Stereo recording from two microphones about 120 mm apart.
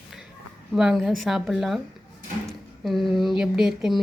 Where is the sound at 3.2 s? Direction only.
5° right (ahead or behind).